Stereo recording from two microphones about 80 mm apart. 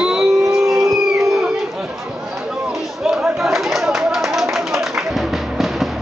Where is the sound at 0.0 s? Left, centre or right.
Centre.